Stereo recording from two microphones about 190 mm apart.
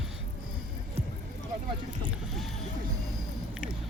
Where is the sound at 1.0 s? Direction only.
35° right (ahead or behind).